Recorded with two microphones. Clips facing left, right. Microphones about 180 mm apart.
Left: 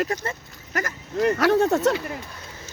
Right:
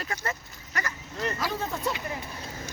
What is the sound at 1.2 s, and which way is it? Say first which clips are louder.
Speech: left 12 dB; 70° left (ahead or behind).